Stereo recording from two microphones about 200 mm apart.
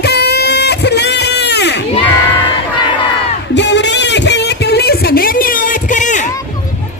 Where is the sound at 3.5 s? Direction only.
60° left (ahead or behind); by 6.2 s 40° left (ahead or behind).